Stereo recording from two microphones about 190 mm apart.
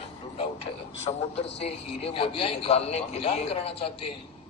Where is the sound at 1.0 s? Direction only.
30° left (ahead or behind).